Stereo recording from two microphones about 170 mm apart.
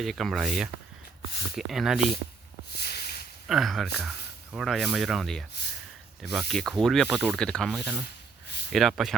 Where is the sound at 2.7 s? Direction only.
70° left (ahead or behind).